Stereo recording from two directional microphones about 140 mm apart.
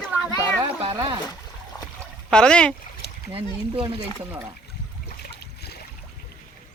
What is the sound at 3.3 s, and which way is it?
Speech, 40° right (ahead or behind).